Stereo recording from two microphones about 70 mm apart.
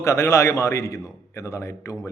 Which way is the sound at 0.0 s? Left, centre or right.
Left.